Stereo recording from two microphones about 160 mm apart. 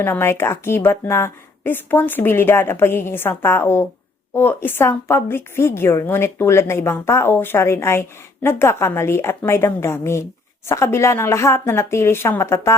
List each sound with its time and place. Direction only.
0.0 s a woman's voice: 15° left (ahead or behind)